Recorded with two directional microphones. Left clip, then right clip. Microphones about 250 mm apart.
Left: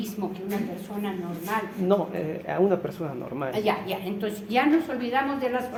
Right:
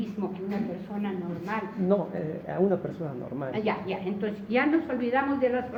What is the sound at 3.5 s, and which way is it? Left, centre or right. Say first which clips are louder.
A woman's voice: left 3 dB; left.